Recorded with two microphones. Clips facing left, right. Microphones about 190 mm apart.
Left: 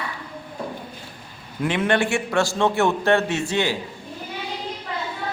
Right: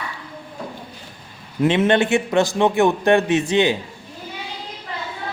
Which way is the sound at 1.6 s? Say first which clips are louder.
Right 5 dB; 25° right (ahead or behind).